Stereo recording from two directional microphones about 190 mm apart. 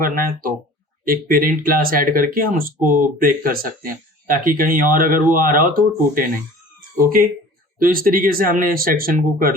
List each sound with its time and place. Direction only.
0.0 s speech: 50° right (ahead or behind)